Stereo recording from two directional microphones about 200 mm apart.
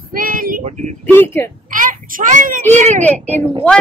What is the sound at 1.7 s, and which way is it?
A child's voice, 40° right (ahead or behind).